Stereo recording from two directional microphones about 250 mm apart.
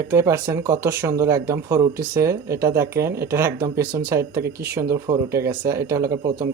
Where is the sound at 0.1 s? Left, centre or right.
Centre.